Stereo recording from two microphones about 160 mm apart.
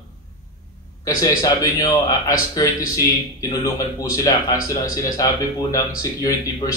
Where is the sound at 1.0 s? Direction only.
20° left (ahead or behind).